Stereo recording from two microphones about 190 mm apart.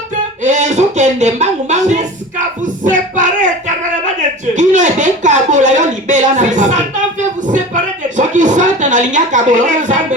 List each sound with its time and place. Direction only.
0.4 s speech: 40° right (ahead or behind)
4.5 s speech: 40° right (ahead or behind)